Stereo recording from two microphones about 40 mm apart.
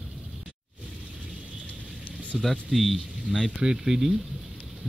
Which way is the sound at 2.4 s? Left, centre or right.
Centre.